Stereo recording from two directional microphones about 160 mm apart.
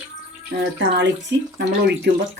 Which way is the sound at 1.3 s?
90° right.